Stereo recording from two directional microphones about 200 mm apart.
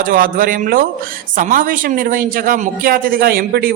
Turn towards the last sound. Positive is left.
turn(degrees=-50)  # may be behind; listen again after turning